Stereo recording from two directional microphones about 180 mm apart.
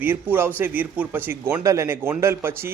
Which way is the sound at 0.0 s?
10° right (ahead or behind).